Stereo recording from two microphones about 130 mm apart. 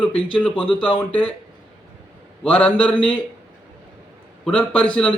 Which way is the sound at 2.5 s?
10° left (ahead or behind).